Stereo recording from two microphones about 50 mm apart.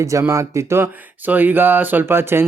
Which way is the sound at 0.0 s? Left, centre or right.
Right.